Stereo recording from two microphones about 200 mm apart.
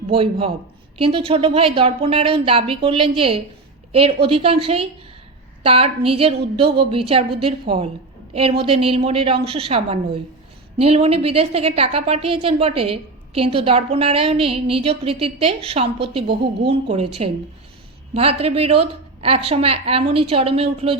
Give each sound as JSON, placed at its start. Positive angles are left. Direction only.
{"t": 0.1, "sound": "a woman's voice", "side_deg": -25}
{"t": 18.1, "sound": "a woman's voice", "side_deg": -30}